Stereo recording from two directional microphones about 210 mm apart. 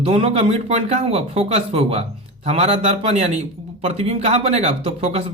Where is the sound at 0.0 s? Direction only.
25° right (ahead or behind).